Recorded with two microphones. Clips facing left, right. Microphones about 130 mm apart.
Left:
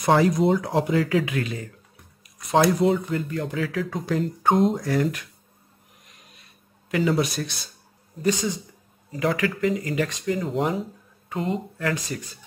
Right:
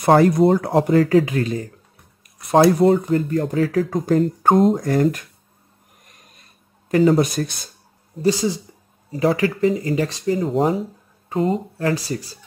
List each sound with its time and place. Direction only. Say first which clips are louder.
0.0 s speech: right 5 dB; 55° right (ahead or behind); by 1.7 s 40° right (ahead or behind)
2.8 s speech: right 6 dB; 40° right (ahead or behind)
6.0 s a sound: right 2 dB; 45° right (ahead or behind)
6.9 s speech: right 7 dB; 40° right (ahead or behind)
8.2 s speech: right 5 dB; 30° right (ahead or behind)